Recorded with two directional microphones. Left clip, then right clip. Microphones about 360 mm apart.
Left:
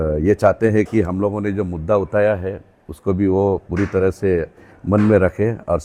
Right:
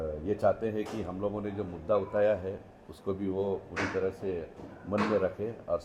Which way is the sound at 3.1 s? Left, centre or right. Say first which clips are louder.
Left 15 dB; left.